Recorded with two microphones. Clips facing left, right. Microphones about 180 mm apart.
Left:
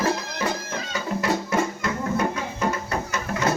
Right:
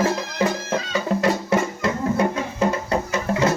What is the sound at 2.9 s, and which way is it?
Music, 30° right (ahead or behind).